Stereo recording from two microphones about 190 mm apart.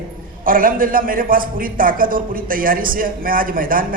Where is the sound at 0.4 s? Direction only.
45° right (ahead or behind).